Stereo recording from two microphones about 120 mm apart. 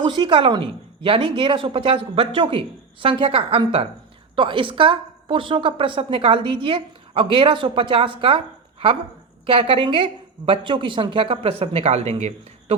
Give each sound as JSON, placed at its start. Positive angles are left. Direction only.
{"t": 0.0, "sound": "a woman's voice", "side_deg": -40}
{"t": 9.5, "sound": "a woman's voice", "side_deg": -50}